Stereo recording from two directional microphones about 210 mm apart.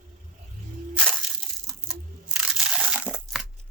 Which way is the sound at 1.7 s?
Centre (ahead or behind).